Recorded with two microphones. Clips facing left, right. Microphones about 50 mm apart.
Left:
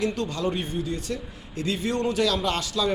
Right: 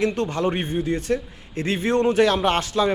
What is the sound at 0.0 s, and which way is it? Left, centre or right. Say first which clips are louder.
A man's voice: right 4 dB; right.